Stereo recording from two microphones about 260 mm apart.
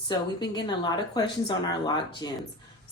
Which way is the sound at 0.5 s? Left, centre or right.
Centre.